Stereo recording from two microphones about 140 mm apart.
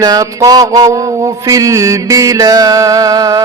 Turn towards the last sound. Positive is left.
turn(degrees=-25)  # may be behind; listen again after turning